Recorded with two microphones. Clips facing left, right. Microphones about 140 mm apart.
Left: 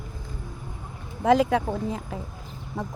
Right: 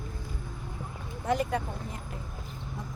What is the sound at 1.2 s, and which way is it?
Speech, 90° left.